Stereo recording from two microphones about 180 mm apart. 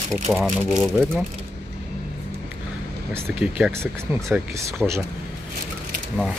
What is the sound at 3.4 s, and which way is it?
Speech, 5° right (ahead or behind).